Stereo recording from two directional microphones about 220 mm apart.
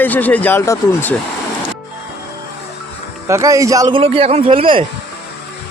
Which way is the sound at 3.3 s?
15° right (ahead or behind).